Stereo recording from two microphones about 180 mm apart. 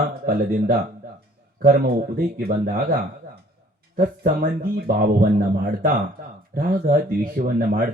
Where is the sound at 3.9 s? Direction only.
50° right (ahead or behind).